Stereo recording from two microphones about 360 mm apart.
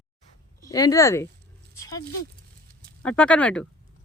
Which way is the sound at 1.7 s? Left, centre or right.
Centre.